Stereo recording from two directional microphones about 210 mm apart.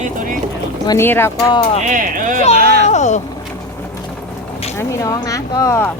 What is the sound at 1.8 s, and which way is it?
Speech, 40° right (ahead or behind).